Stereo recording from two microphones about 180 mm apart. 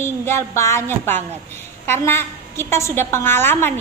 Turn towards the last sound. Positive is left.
turn(degrees=10)  # may be behind; listen again after turning